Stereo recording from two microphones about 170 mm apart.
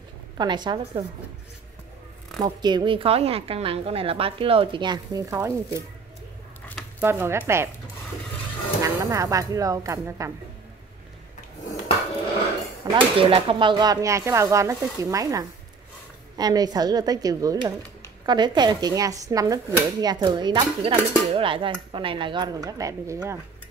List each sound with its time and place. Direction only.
0.4 s speech: 25° right (ahead or behind)
2.4 s a woman's voice: 25° right (ahead or behind)
7.0 s speech: 15° right (ahead or behind)
8.8 s speech: 20° right (ahead or behind)
12.9 s speech: 30° right (ahead or behind)